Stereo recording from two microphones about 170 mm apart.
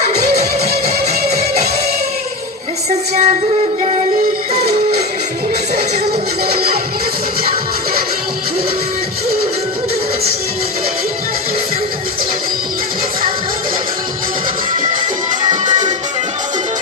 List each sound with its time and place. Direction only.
2.9 s music: 45° right (ahead or behind)
6.5 s music: 65° right (ahead or behind)